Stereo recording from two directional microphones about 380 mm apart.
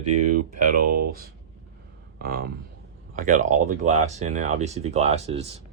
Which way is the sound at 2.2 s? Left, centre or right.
Right.